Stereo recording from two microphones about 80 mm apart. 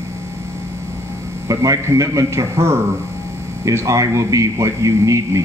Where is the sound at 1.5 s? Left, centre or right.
Right.